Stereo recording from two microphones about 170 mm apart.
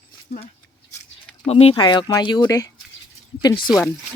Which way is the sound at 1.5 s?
35° left (ahead or behind).